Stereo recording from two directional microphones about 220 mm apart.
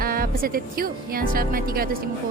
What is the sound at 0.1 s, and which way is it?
Speech, 40° right (ahead or behind).